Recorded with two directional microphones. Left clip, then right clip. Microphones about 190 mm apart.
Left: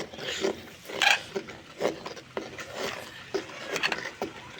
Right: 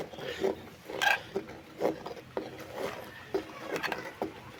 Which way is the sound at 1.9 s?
5° right (ahead or behind).